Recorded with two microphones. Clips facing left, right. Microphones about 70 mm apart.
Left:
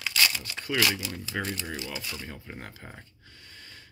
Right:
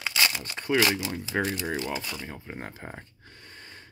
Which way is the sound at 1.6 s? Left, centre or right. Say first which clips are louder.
Right 6 dB; right.